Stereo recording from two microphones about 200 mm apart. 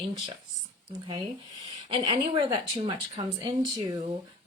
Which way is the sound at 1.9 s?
25° right (ahead or behind).